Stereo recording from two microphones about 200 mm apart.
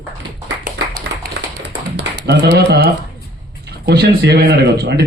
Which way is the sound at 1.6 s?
55° right (ahead or behind).